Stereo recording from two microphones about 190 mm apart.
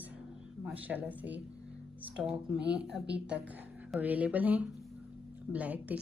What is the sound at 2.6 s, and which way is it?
Speech, 60° right (ahead or behind).